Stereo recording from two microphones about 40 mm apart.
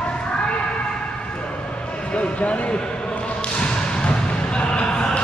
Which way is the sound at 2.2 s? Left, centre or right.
Left.